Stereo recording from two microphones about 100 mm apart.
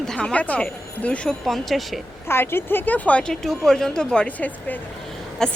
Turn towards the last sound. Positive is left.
turn(degrees=5)  # may be behind; listen again after turning